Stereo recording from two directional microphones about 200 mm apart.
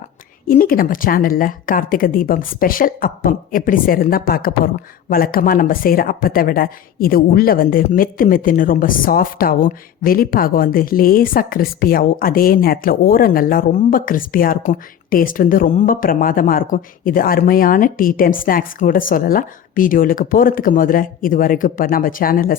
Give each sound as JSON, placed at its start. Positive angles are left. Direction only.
{"t": 0.4, "sound": "a woman's voice", "side_deg": 45}